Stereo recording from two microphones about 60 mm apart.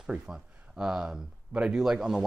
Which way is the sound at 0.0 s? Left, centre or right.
Centre.